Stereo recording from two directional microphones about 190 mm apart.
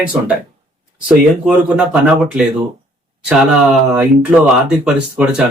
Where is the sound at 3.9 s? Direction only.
10° right (ahead or behind).